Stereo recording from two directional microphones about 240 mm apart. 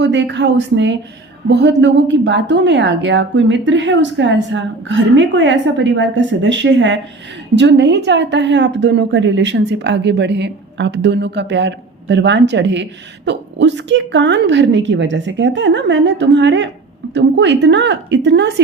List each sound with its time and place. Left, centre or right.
0.0 s a woman's voice: right